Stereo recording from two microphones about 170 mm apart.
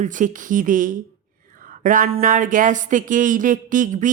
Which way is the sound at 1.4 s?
50° right (ahead or behind).